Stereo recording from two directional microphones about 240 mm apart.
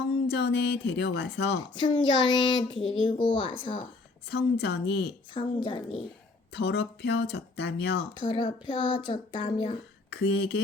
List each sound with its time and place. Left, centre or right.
0.3 s speech: left
1.7 s speech: centre
2.7 s speech: left
3.0 s speech: left
4.3 s speech: left
5.3 s speech: left
6.5 s speech: left
8.2 s speech: left
10.1 s speech: left